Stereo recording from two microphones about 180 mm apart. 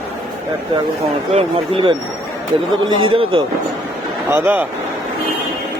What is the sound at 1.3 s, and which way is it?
A man's voice, 30° right (ahead or behind).